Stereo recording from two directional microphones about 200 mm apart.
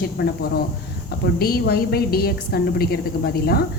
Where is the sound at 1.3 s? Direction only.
50° left (ahead or behind).